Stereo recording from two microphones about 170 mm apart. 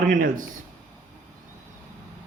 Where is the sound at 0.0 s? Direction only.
55° right (ahead or behind).